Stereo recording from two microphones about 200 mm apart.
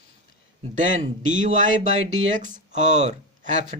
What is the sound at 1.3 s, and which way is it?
Speech, 40° right (ahead or behind).